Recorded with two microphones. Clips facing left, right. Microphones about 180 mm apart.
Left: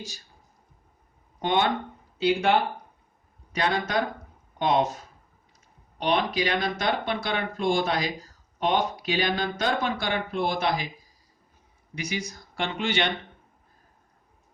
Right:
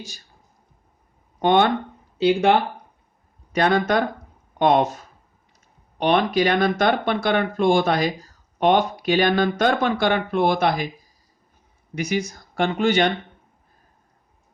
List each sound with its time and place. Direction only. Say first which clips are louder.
1.4 s speech: right 7 dB; 60° right (ahead or behind)
3.5 s speech: right 7 dB; 55° right (ahead or behind)
6.0 s speech: right 6 dB; 55° right (ahead or behind)
11.9 s speech: right 8 dB; 50° right (ahead or behind)